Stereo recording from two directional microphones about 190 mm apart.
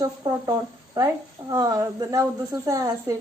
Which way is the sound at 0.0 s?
20° right (ahead or behind).